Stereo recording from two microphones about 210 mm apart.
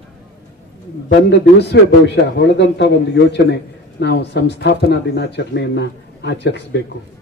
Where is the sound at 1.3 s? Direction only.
55° left (ahead or behind).